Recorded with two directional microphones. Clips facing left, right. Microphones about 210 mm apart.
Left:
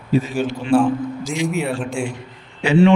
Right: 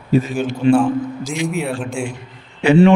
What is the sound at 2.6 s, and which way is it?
Speech, 55° right (ahead or behind).